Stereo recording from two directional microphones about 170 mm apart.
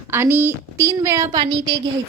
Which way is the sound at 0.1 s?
15° right (ahead or behind).